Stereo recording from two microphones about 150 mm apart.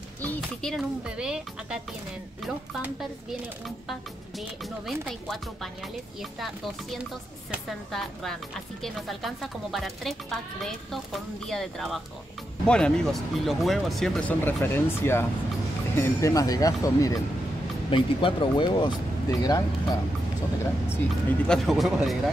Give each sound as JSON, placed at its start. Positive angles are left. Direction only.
{"t": 0.2, "sound": "speech", "side_deg": 5}
{"t": 14.4, "sound": "speech", "side_deg": 15}
{"t": 17.8, "sound": "speech", "side_deg": 35}
{"t": 21.5, "sound": "speech", "side_deg": 0}